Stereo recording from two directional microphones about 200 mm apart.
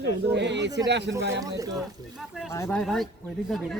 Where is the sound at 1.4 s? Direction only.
15° right (ahead or behind).